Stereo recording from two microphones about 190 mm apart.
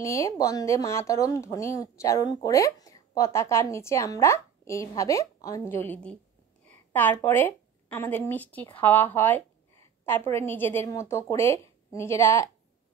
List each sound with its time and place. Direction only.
0.0 s speech: 15° left (ahead or behind)